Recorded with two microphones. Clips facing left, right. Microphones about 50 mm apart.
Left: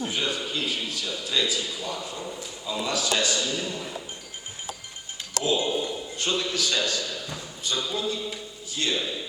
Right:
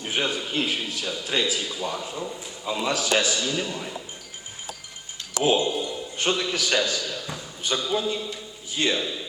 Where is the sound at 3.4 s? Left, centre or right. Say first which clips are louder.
Right 2 dB; right.